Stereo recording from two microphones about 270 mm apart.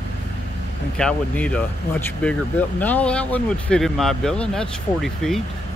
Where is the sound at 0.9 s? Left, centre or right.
Centre.